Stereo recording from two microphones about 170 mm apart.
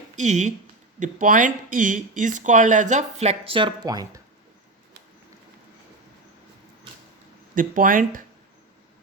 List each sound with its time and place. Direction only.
0.2 s speech: 45° right (ahead or behind); by 4.2 s 20° right (ahead or behind)
7.5 s speech: 55° right (ahead or behind)